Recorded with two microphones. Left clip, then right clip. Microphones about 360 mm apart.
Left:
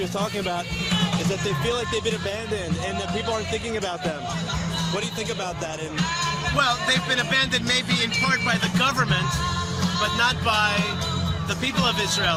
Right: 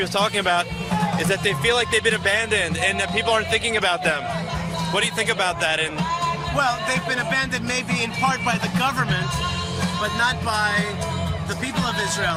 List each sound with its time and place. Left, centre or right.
0.2 s a man's voice: right
4.9 s a man's voice: right
6.6 s music: centre